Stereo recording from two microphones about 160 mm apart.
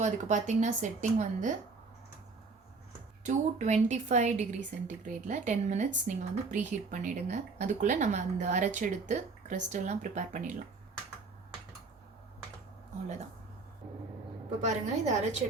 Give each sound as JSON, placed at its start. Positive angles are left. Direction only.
{"t": 0.0, "sound": "speech", "side_deg": -50}
{"t": 3.2, "sound": "speech", "side_deg": -50}
{"t": 14.6, "sound": "speech", "side_deg": -45}